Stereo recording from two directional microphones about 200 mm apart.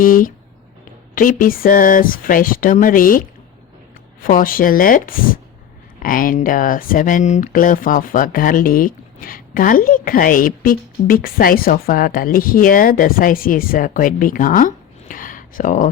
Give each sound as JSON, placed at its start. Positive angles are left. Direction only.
{"t": 0.0, "sound": "speech", "side_deg": 45}